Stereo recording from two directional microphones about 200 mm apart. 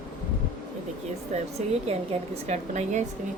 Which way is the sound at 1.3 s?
35° right (ahead or behind).